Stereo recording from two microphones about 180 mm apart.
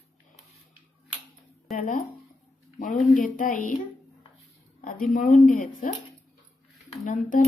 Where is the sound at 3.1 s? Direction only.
50° left (ahead or behind).